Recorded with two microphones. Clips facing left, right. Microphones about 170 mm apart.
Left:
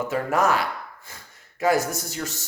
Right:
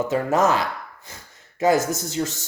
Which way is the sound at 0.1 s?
25° right (ahead or behind).